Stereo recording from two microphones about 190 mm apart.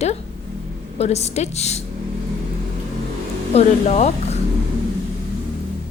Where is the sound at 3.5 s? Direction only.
35° left (ahead or behind).